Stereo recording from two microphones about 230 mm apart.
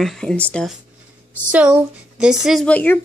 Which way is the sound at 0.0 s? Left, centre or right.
Centre.